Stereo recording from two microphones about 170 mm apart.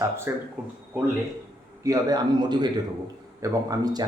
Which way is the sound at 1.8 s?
20° right (ahead or behind).